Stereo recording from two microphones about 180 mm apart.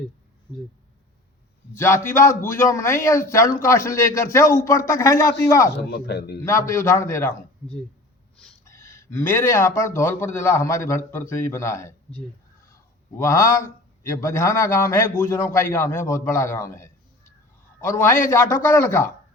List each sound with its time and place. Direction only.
1.7 s speech: 15° left (ahead or behind)
5.7 s speech: 65° left (ahead or behind)
6.4 s speech: 15° left (ahead or behind)
13.1 s a man's voice: 15° left (ahead or behind)